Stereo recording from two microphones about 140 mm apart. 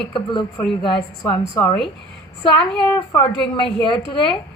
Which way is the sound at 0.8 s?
35° left (ahead or behind).